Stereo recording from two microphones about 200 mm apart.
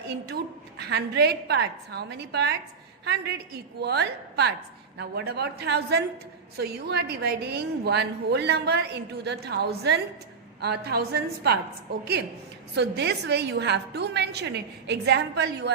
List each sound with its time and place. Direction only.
0.1 s a woman's voice: 55° right (ahead or behind)
12.7 s a woman's voice: 55° right (ahead or behind)